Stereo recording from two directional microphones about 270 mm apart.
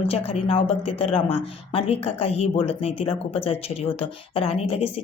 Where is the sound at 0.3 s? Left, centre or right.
Left.